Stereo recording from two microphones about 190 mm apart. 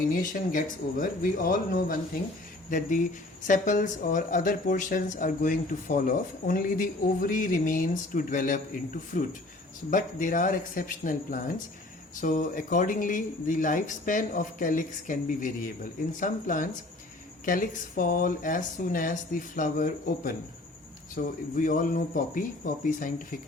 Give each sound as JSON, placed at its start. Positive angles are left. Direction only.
{"t": 0.1, "sound": "speech", "side_deg": 45}